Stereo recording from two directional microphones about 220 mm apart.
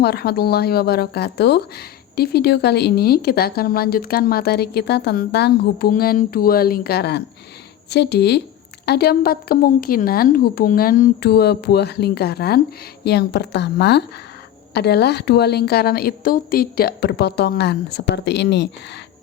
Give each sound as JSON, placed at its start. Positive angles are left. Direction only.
{"t": 0.0, "sound": "speech", "side_deg": 45}